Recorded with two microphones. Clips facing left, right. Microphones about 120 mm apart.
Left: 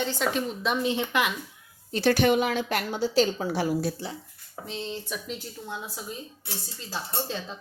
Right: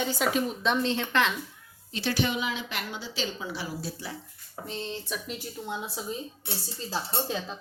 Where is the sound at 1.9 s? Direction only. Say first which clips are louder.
Left 7 dB; 50° left (ahead or behind).